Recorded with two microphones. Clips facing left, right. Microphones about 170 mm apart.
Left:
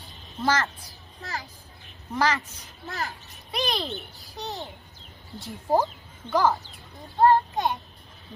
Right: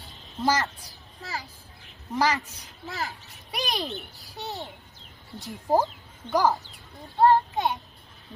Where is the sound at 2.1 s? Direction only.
15° right (ahead or behind).